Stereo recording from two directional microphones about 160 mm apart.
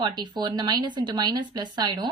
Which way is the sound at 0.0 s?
30° right (ahead or behind).